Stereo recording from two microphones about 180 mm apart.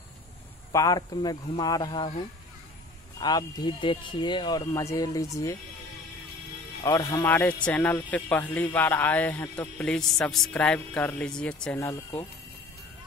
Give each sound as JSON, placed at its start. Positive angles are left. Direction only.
{"t": 0.7, "sound": "speech", "side_deg": 20}
{"t": 6.8, "sound": "speech", "side_deg": 15}